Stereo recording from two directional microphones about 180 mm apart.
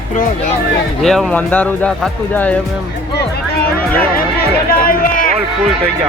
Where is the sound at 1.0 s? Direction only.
Centre (ahead or behind).